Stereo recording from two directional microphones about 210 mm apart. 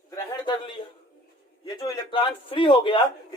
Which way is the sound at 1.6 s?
25° left (ahead or behind).